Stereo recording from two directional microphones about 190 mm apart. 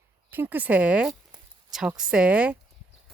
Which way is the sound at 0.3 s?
10° right (ahead or behind).